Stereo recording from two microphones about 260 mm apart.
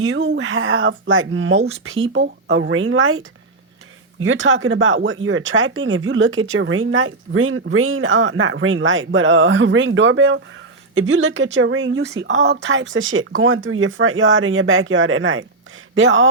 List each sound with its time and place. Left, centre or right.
0.0 s speech: right